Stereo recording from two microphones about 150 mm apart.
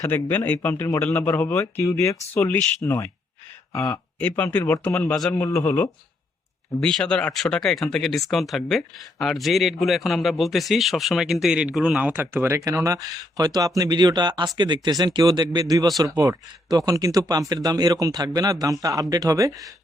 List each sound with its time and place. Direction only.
0.0 s a man's voice: 15° left (ahead or behind)
5.3 s a man's voice: 20° left (ahead or behind)
6.7 s speech: 5° left (ahead or behind); by 19.5 s 20° right (ahead or behind)